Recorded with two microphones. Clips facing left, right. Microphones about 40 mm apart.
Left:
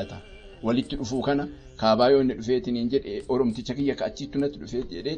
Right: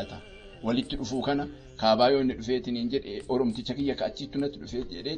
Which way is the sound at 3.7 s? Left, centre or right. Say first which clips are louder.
Left 3 dB; centre.